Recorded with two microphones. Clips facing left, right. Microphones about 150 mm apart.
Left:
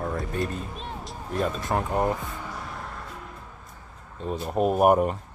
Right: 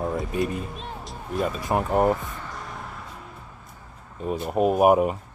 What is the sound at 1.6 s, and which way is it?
Speech, 20° right (ahead or behind).